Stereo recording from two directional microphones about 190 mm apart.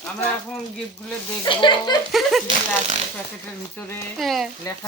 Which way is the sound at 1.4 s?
25° left (ahead or behind).